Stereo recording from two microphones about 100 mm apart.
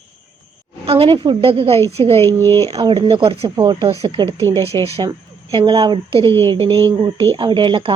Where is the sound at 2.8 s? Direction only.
60° right (ahead or behind).